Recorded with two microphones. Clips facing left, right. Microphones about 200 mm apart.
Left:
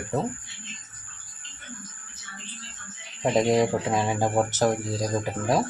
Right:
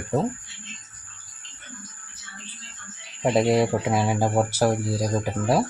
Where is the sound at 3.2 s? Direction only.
10° right (ahead or behind).